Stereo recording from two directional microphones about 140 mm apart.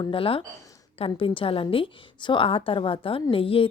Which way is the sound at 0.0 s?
40° left (ahead or behind).